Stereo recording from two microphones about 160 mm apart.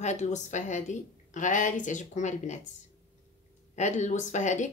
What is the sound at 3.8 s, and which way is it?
Speech, 50° left (ahead or behind).